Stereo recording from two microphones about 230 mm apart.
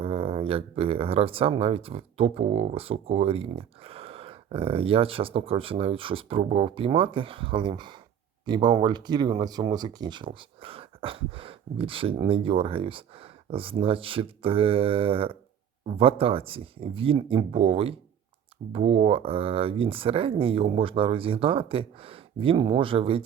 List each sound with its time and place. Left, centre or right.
0.0 s speech: right